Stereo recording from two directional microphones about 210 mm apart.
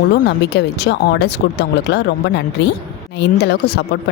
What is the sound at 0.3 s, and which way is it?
Speech, 55° left (ahead or behind).